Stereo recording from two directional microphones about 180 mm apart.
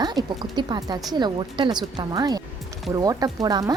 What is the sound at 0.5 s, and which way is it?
A woman's voice, 25° right (ahead or behind).